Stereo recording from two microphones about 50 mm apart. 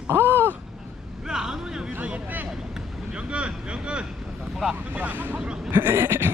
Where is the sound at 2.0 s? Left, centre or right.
Right.